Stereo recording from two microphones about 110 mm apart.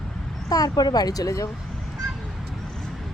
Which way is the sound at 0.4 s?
35° left (ahead or behind).